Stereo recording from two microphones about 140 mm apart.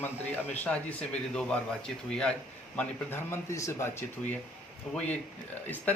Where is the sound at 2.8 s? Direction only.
15° left (ahead or behind).